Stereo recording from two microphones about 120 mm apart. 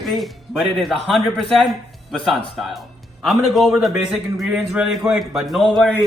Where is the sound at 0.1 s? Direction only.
Centre (ahead or behind).